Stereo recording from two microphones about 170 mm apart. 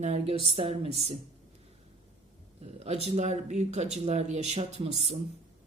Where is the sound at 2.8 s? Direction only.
40° right (ahead or behind).